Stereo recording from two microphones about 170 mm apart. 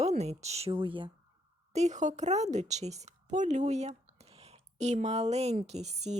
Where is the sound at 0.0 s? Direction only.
40° right (ahead or behind).